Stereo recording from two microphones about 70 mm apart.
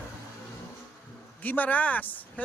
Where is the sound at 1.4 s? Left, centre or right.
Left.